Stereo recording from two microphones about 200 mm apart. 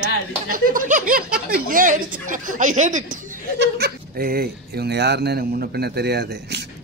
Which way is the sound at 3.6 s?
50° right (ahead or behind).